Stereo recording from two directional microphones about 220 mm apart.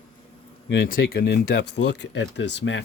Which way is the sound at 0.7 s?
40° left (ahead or behind).